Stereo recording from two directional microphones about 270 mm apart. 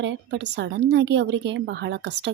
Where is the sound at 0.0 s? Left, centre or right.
Right.